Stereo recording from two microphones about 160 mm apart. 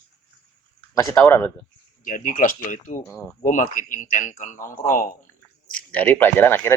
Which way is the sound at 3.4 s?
55° left (ahead or behind).